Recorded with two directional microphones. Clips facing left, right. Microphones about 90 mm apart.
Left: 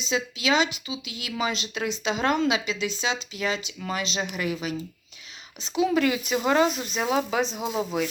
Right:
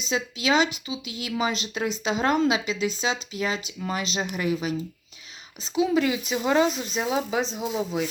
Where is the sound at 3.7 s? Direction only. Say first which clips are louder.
Right 1 dB; 30° right (ahead or behind).